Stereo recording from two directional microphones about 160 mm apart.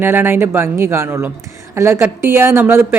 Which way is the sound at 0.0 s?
15° right (ahead or behind).